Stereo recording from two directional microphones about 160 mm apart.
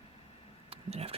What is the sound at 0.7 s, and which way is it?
Vehicle, 40° right (ahead or behind).